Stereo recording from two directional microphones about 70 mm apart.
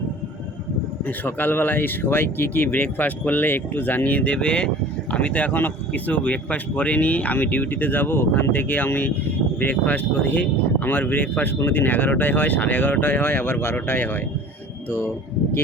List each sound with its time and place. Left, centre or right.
1.0 s speech: left